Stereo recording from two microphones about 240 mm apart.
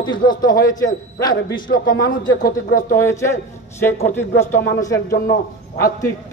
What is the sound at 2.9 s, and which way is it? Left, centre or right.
Speech, centre.